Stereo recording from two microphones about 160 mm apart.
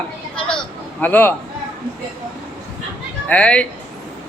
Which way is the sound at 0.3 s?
5° left (ahead or behind).